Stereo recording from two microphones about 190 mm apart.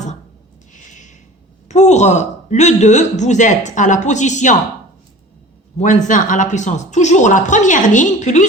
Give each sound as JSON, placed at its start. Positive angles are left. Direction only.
{"t": 0.7, "sound": "a sound", "side_deg": 40}
{"t": 1.6, "sound": "speech", "side_deg": 35}
{"t": 5.7, "sound": "speech", "side_deg": 40}